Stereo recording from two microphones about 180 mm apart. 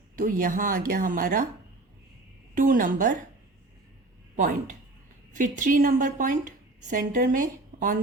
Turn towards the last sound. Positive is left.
turn(degrees=-50)  # may be behind; listen again after turning